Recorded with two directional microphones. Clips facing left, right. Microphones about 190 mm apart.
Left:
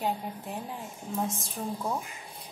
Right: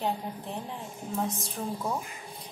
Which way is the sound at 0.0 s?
5° left (ahead or behind).